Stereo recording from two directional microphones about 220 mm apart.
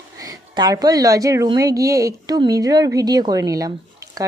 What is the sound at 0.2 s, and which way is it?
Speech, 15° right (ahead or behind).